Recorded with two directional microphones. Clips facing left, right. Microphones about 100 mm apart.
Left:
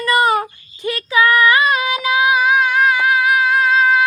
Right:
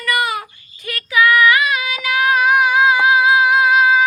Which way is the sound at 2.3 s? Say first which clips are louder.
Right 1 dB; 5° right (ahead or behind).